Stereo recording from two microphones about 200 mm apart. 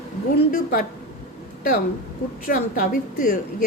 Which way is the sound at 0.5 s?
45° left (ahead or behind).